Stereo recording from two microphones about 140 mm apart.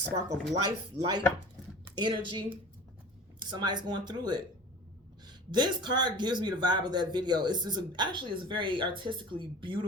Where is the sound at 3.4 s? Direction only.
30° right (ahead or behind).